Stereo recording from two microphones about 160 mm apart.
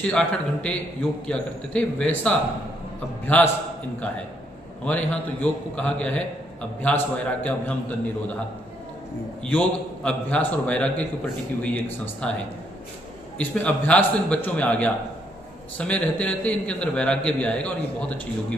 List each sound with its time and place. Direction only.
0.0 s a man's voice: 5° left (ahead or behind)
4.8 s a man's voice: 10° left (ahead or behind)
9.4 s a man's voice: 5° left (ahead or behind)
13.4 s a man's voice: 10° left (ahead or behind)